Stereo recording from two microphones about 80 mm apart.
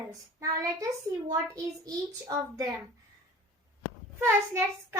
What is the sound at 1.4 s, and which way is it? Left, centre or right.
A child's voice, right.